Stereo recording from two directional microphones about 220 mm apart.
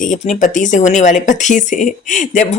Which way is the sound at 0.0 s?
35° left (ahead or behind).